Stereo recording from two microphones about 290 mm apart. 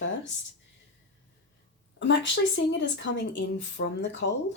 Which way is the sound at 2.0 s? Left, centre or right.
Left.